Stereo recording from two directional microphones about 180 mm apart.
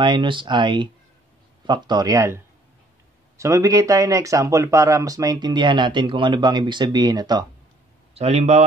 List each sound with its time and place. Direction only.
0.0 s speech: 25° right (ahead or behind)
8.1 s a man's voice: 35° right (ahead or behind)